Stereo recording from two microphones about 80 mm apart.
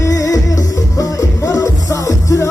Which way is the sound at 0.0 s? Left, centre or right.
Left.